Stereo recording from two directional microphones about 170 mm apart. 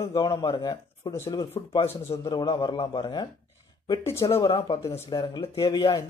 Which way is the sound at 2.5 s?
30° left (ahead or behind).